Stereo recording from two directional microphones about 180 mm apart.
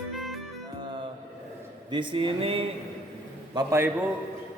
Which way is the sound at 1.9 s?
25° right (ahead or behind).